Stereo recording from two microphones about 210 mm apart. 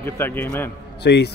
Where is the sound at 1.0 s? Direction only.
50° left (ahead or behind).